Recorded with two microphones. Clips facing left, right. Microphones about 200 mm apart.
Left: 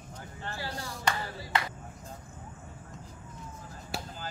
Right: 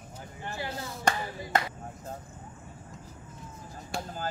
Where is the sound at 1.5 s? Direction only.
45° right (ahead or behind).